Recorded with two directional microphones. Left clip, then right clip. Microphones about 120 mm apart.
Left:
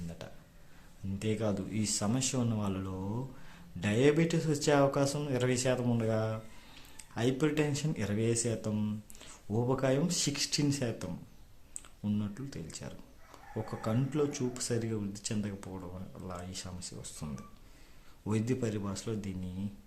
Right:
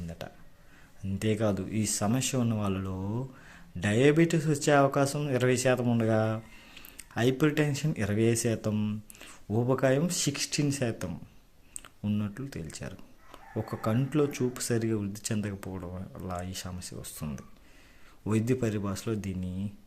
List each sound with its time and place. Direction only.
0.2 s a sound: 30° right (ahead or behind)
1.2 s speech: 35° right (ahead or behind)
8.7 s speech: 20° right (ahead or behind)